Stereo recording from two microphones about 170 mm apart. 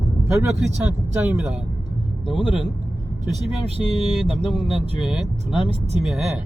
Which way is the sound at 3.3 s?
40° right (ahead or behind).